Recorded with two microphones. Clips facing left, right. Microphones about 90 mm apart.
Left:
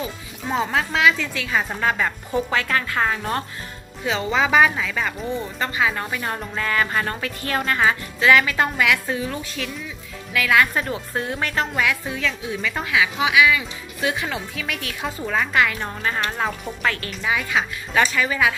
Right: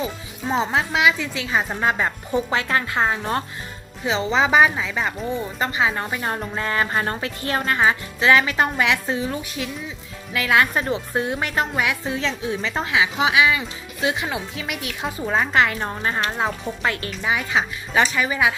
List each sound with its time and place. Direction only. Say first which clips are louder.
0.5 s a woman's voice: right 1 dB; 20° right (ahead or behind)
15.3 s a woman's voice: right 1 dB; 30° right (ahead or behind)